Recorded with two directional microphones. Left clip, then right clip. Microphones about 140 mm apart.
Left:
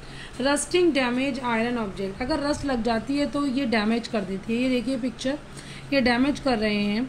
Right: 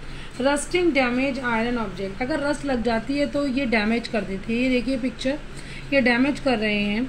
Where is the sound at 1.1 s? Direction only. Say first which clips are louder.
Right 2 dB; 60° left (ahead or behind).